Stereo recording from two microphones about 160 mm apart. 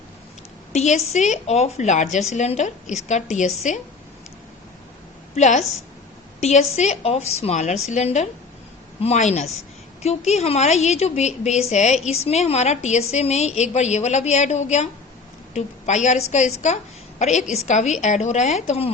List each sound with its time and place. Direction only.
0.7 s a woman's voice: 45° left (ahead or behind)
5.3 s a woman's voice: 45° left (ahead or behind)